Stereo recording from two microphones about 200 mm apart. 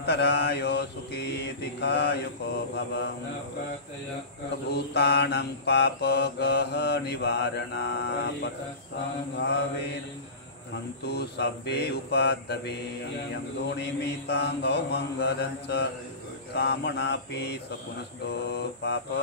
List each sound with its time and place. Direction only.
0.0 s mantra: 55° left (ahead or behind)
4.6 s mantra: 55° left (ahead or behind)
11.1 s mantra: 55° left (ahead or behind)